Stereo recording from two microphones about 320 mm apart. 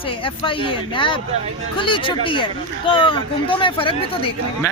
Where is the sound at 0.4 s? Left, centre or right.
Centre.